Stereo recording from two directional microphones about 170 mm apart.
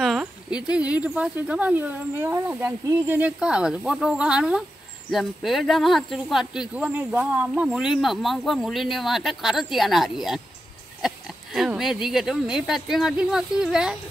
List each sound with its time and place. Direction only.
0.0 s speech: 5° right (ahead or behind)